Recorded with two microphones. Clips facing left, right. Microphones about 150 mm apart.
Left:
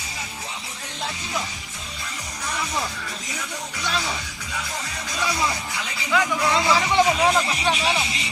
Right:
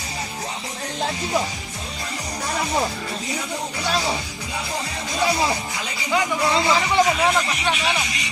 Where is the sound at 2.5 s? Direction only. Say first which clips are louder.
Right 5 dB; 40° right (ahead or behind).